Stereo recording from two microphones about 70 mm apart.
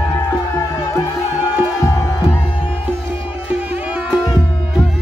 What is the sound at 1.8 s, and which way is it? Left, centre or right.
Music, left.